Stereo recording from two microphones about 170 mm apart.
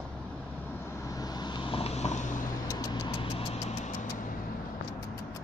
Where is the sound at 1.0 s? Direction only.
20° left (ahead or behind); by 2.5 s 50° left (ahead or behind).